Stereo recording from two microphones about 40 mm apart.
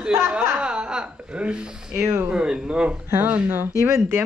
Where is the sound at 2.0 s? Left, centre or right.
Right.